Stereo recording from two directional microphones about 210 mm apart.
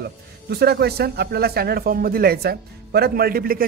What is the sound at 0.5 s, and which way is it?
Speech, 50° right (ahead or behind).